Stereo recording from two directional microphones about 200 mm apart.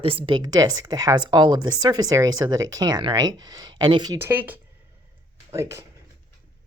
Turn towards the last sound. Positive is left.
turn(degrees=-15)  # may be behind; listen again after turning